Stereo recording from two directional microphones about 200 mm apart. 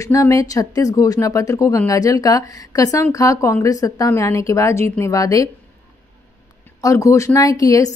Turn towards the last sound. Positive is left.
turn(degrees=15)  # may be behind; listen again after turning